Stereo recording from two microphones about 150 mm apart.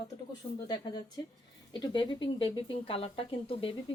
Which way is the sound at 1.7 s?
30° left (ahead or behind).